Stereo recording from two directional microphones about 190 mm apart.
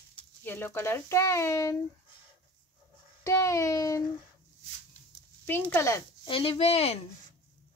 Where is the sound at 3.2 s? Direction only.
15° left (ahead or behind).